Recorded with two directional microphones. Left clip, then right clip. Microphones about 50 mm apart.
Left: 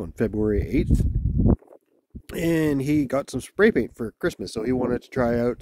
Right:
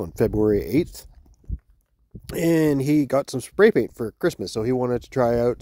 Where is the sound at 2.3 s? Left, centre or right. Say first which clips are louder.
Right 3 dB; right.